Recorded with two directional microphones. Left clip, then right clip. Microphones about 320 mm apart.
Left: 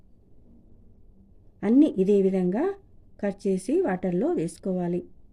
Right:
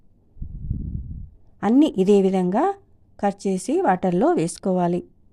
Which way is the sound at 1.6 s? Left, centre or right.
Right.